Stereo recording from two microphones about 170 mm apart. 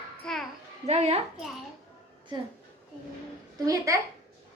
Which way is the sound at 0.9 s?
40° right (ahead or behind).